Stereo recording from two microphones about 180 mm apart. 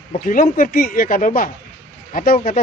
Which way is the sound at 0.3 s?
50° left (ahead or behind).